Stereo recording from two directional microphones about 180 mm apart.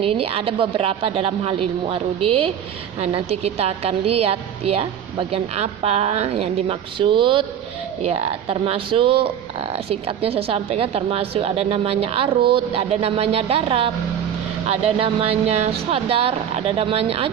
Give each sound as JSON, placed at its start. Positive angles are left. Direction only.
{"t": 0.0, "sound": "a woman's voice", "side_deg": -30}